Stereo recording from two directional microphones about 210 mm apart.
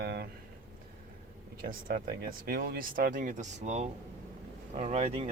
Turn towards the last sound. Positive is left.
turn(degrees=-30)  # may be behind; listen again after turning